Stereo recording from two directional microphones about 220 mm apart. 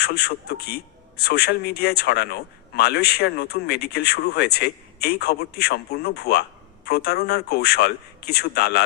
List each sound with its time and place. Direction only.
0.0 s a man's voice: 45° left (ahead or behind)